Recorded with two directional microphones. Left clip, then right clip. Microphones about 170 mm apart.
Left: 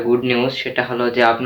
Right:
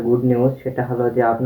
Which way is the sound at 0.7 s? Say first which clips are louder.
Left 1 dB; 20° left (ahead or behind).